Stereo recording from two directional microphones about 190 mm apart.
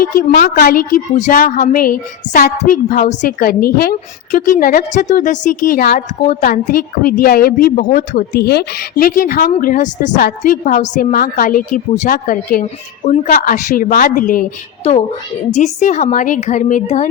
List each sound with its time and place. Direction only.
0.0 s a woman's voice: 50° left (ahead or behind)
8.3 s a woman's voice: 55° left (ahead or behind)
15.5 s a woman's voice: 40° left (ahead or behind)